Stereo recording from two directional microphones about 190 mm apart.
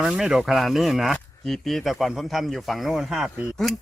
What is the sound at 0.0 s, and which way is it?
Speech, centre (ahead or behind).